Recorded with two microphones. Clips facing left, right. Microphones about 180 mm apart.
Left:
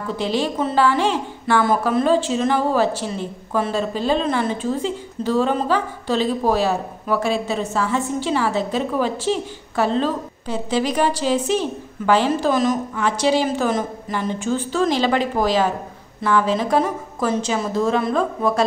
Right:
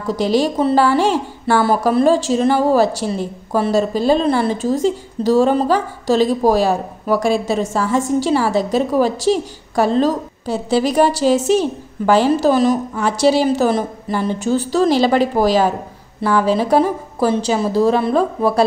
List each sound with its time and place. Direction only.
0.1 s a woman's voice: 40° right (ahead or behind)